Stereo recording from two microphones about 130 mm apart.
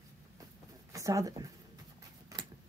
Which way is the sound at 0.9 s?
25° right (ahead or behind).